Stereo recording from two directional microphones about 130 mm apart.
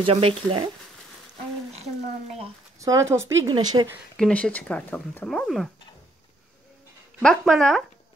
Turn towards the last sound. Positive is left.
turn(degrees=0)  # may be behind; listen again after turning